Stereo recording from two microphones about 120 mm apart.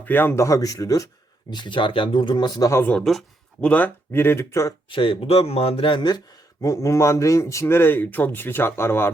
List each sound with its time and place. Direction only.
0.0 s speech: 15° left (ahead or behind)
1.5 s speech: 40° left (ahead or behind)
2.8 s speech: 5° left (ahead or behind)
3.7 s speech: 15° left (ahead or behind)
4.9 s speech: 45° left (ahead or behind); by 9.1 s 20° left (ahead or behind)